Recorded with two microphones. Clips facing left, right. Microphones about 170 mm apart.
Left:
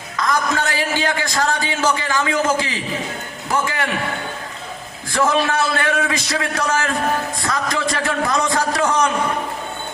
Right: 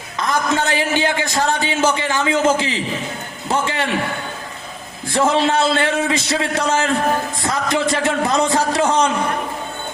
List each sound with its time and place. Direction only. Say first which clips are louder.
0.2 s a man's voice: right 1 dB; 20° right (ahead or behind)
5.1 s a man's voice: right 2 dB; 25° right (ahead or behind)